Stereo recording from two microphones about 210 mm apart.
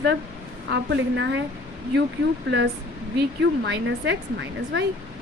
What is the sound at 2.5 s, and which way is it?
Speech, 55° right (ahead or behind).